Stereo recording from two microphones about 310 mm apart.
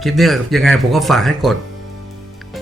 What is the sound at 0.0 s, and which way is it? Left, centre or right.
Speech, centre.